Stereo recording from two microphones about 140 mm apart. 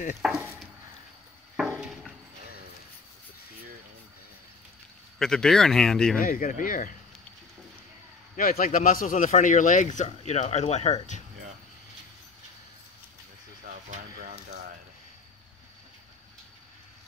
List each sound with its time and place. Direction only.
0.2 s speech: centre (ahead or behind)
1.6 s a sound: 5° right (ahead or behind)
5.2 s speech: 5° left (ahead or behind)
6.2 s speech: 80° left
8.4 s speech: 85° left; by 11.2 s 55° left (ahead or behind)
13.7 s a sound: 70° right (ahead or behind)